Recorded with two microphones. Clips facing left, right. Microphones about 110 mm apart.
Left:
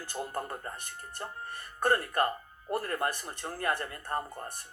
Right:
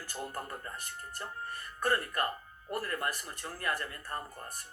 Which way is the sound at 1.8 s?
40° left (ahead or behind).